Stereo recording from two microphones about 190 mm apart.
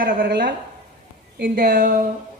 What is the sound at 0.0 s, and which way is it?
A woman's voice, 50° right (ahead or behind).